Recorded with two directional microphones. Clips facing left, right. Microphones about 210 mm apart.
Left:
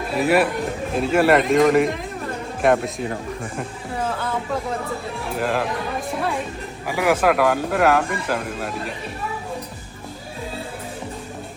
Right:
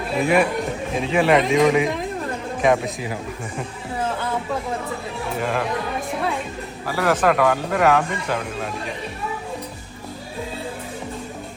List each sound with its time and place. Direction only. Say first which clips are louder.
0.2 s speech: even; 5° left (ahead or behind)
5.4 s speech: left 2 dB; centre (ahead or behind)
6.8 s speech: left 1 dB; 15° left (ahead or behind)